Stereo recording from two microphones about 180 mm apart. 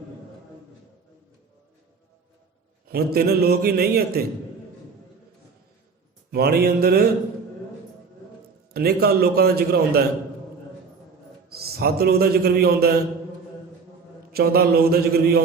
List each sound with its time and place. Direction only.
2.9 s a man's voice: 60° right (ahead or behind)
6.3 s a man's voice: 60° right (ahead or behind)
8.7 s a man's voice: 60° right (ahead or behind)
11.4 s a man's voice: 60° right (ahead or behind)
14.3 s a man's voice: 60° right (ahead or behind)